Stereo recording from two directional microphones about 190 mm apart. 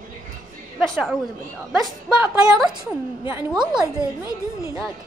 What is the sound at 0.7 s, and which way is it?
Speech, centre (ahead or behind).